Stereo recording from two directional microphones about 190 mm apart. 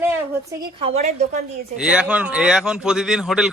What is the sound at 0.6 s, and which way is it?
Speech, 30° right (ahead or behind).